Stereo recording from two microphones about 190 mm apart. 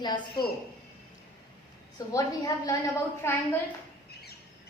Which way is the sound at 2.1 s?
20° left (ahead or behind).